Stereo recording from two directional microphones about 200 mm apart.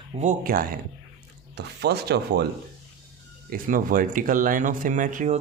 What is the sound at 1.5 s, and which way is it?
Speech, 55° right (ahead or behind).